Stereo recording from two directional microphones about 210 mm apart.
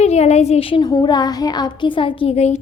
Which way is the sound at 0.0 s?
30° left (ahead or behind).